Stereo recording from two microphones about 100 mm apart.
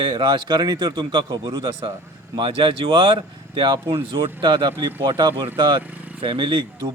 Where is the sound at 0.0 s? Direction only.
50° right (ahead or behind).